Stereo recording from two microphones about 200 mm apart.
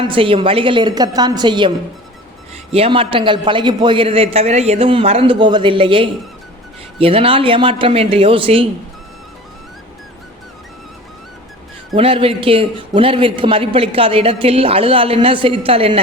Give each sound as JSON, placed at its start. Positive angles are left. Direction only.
{"t": 0.0, "sound": "a man's voice", "side_deg": -25}
{"t": 2.7, "sound": "a man's voice", "side_deg": -30}
{"t": 11.9, "sound": "a man's voice", "side_deg": -30}